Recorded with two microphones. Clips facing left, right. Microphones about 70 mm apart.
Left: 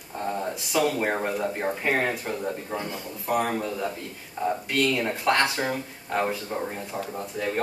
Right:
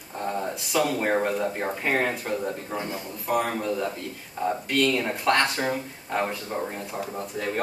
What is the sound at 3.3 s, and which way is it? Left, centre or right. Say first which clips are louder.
Speech: even; centre.